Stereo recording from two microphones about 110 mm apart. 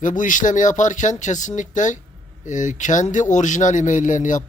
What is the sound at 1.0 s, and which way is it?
Speech, 90° left.